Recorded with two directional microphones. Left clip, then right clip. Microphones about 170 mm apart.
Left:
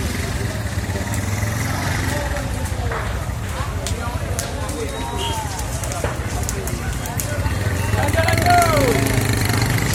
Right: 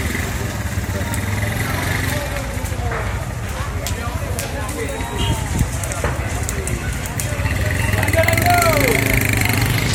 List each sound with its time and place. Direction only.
8.1 s vehicle: 50° right (ahead or behind)